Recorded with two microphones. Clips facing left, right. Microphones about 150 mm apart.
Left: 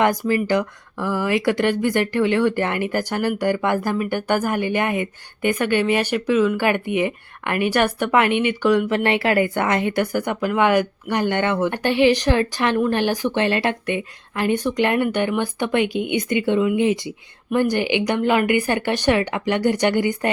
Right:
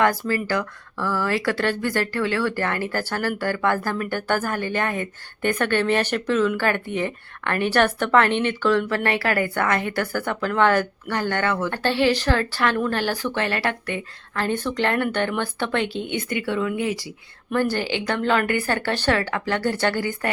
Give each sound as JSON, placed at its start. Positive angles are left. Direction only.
{"t": 0.0, "sound": "speech", "side_deg": 20}